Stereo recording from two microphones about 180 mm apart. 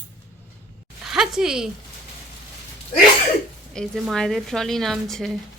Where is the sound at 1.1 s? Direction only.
Centre (ahead or behind).